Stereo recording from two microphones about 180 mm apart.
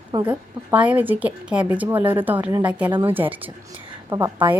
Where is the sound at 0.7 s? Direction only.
10° right (ahead or behind).